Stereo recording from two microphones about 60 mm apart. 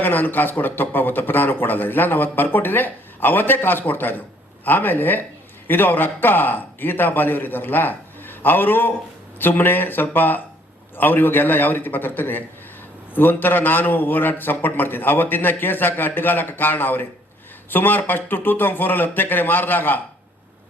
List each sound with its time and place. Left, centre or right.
0.0 s speech: left